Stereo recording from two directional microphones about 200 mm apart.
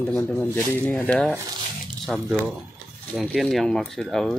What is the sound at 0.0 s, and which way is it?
Speech, 5° left (ahead or behind).